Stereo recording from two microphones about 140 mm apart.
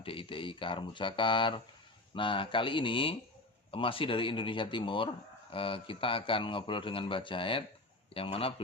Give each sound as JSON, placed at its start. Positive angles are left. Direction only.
{"t": 0.0, "sound": "a man's voice", "side_deg": 40}